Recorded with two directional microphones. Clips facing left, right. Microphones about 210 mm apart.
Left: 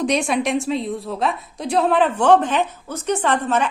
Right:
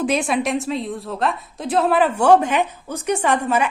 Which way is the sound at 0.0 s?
5° right (ahead or behind).